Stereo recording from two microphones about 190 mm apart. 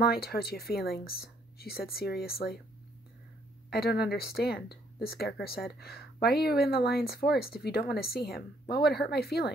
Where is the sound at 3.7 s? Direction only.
55° left (ahead or behind).